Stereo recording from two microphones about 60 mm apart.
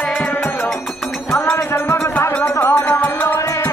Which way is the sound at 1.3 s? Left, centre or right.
Left.